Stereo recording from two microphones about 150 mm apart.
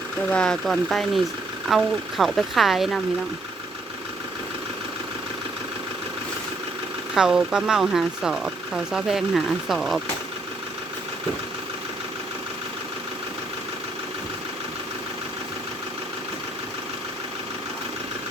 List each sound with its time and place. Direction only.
0.3 s speech: 5° left (ahead or behind)
7.1 s speech: 5° right (ahead or behind)